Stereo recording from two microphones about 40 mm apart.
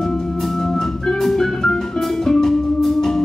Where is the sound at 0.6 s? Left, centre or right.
Centre.